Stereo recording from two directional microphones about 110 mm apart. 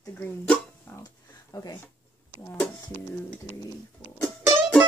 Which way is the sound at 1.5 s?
35° left (ahead or behind).